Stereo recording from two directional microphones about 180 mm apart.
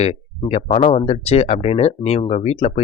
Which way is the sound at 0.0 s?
35° left (ahead or behind).